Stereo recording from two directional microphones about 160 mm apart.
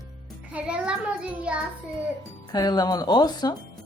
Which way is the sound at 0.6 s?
5° right (ahead or behind).